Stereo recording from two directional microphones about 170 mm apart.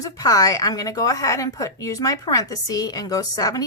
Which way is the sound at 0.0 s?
20° left (ahead or behind).